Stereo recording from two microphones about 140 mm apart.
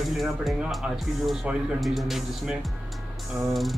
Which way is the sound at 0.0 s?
Centre (ahead or behind).